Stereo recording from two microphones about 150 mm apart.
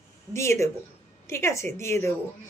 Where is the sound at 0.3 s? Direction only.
20° left (ahead or behind).